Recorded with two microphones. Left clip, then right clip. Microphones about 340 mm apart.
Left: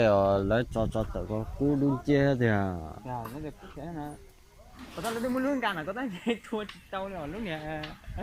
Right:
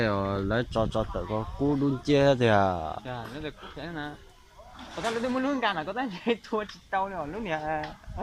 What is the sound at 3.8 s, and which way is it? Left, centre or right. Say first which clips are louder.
Speech: right 2 dB; right.